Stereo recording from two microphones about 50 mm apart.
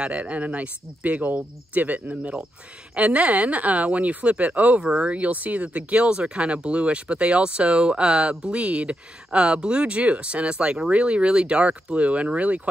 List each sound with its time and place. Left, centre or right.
0.0 s speech: right